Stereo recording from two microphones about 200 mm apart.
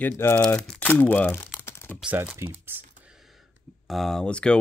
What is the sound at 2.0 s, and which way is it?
Speech, 10° right (ahead or behind).